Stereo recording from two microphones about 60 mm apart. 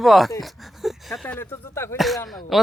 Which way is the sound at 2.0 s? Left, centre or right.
Centre.